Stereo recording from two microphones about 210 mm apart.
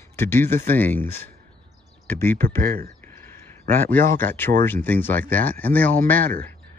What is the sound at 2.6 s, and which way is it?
Speech, 45° right (ahead or behind).